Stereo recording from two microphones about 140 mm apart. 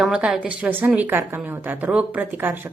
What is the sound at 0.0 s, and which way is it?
Speech, 5° right (ahead or behind).